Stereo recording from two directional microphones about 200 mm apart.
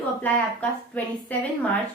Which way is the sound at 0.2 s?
5° left (ahead or behind).